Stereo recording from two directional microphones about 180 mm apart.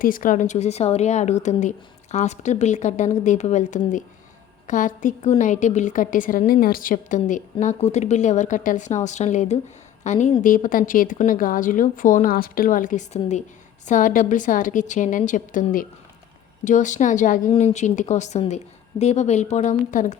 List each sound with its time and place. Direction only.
0.0 s a woman's voice: 50° left (ahead or behind)